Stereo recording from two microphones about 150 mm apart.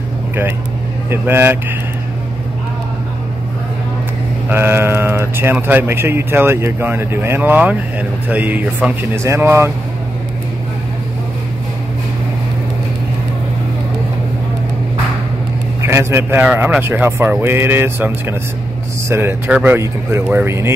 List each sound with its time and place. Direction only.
1.1 s speech: 15° right (ahead or behind)
4.5 s speech: 15° right (ahead or behind)
15.8 s speech: 15° right (ahead or behind)